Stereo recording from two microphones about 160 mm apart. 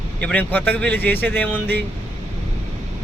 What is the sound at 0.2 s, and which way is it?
Speech, 10° left (ahead or behind).